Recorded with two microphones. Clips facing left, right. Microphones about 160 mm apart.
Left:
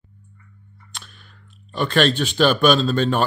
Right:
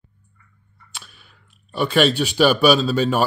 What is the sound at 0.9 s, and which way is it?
Speech, 5° right (ahead or behind).